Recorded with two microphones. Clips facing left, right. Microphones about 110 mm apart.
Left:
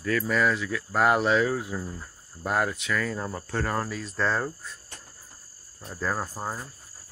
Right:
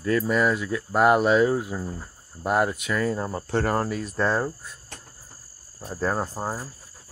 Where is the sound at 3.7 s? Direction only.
45° right (ahead or behind).